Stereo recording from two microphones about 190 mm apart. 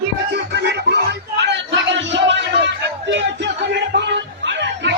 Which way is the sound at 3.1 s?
70° right (ahead or behind).